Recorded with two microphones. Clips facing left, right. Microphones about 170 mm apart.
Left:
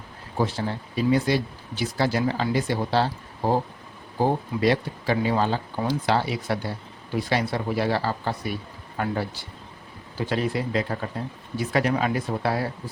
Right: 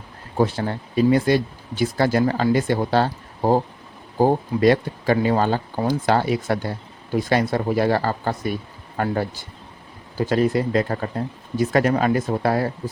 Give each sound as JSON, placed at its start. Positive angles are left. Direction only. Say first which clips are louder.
{"t": 0.3, "sound": "speech", "louder": "right 5 dB", "side_deg": -55}